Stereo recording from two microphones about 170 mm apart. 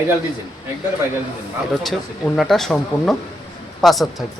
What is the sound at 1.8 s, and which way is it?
Speech, centre (ahead or behind).